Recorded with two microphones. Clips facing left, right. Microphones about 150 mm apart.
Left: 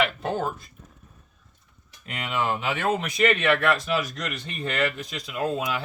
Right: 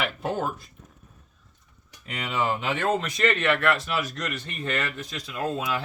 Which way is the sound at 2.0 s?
Centre (ahead or behind).